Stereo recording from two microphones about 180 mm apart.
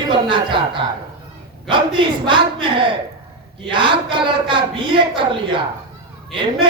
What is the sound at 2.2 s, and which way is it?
Speech, 25° right (ahead or behind).